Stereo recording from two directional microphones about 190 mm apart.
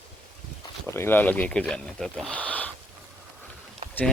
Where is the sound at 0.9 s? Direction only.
10° left (ahead or behind).